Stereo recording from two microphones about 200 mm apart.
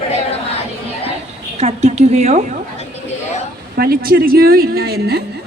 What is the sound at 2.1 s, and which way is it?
Speech, 35° right (ahead or behind).